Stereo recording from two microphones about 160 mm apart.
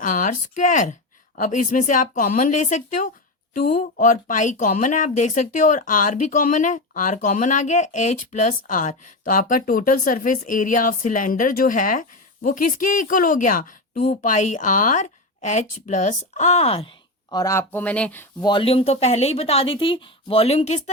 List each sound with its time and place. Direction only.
0.0 s a woman's voice: 55° left (ahead or behind)
13.9 s a woman's voice: 45° left (ahead or behind); by 18.4 s 10° left (ahead or behind)
18.4 s a woman's voice: 35° left (ahead or behind)